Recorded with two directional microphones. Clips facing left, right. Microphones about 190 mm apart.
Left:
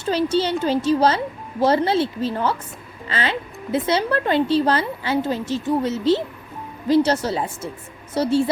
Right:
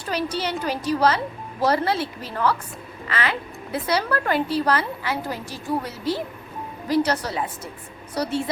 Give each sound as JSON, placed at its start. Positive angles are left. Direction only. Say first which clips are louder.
{"t": 0.0, "sound": "speech", "louder": "left 6 dB", "side_deg": 25}